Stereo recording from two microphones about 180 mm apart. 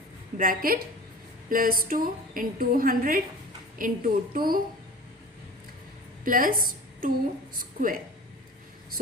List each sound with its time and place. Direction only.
0.3 s a woman's voice: 50° right (ahead or behind)
6.2 s a woman's voice: 50° right (ahead or behind)